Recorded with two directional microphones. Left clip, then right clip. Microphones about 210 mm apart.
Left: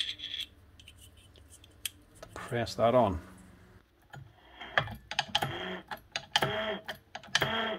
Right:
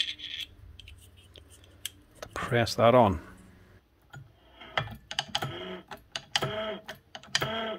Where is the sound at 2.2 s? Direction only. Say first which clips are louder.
Right 7 dB; 40° right (ahead or behind).